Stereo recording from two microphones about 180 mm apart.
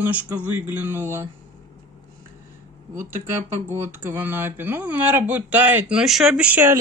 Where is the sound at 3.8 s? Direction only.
10° right (ahead or behind).